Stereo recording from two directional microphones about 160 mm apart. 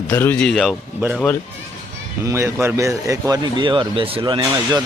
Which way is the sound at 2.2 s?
15° right (ahead or behind).